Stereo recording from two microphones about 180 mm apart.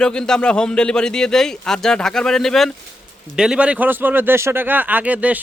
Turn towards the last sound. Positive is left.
turn(degrees=-10)  # may be behind; listen again after turning